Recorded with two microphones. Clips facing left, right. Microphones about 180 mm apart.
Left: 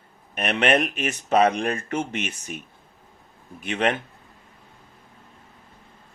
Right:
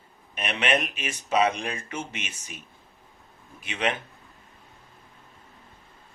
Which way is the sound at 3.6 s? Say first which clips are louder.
Left 5 dB; 55° left (ahead or behind).